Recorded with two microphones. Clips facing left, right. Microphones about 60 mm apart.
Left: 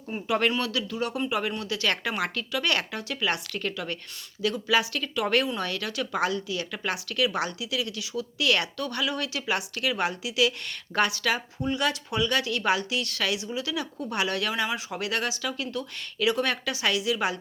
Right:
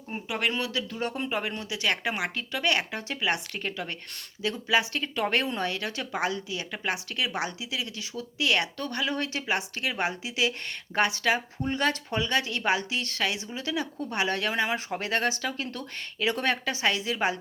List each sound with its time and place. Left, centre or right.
0.7 s a woman's voice: right
1.4 s speech: right
11.6 s a woman's voice: right